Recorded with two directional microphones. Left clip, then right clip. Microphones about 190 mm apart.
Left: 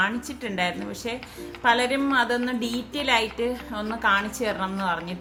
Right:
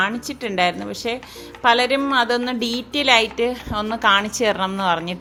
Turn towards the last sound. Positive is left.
turn(degrees=-50)  # may be behind; listen again after turning